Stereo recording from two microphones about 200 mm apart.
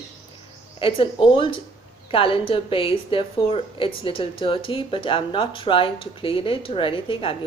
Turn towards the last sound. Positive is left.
turn(degrees=25)  # may be behind; listen again after turning